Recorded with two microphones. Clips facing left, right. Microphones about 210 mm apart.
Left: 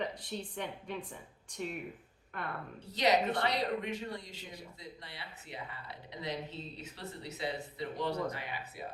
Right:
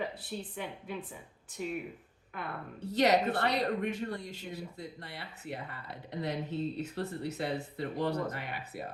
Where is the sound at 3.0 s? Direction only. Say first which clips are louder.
Right 3 dB; 55° right (ahead or behind).